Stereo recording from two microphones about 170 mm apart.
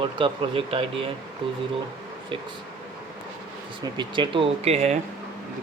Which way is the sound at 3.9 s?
30° right (ahead or behind).